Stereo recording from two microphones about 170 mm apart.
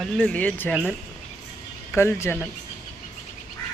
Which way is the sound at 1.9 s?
15° left (ahead or behind).